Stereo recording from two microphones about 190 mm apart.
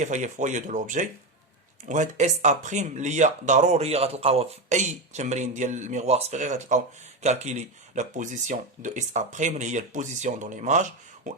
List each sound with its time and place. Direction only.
0.0 s speech: 40° right (ahead or behind)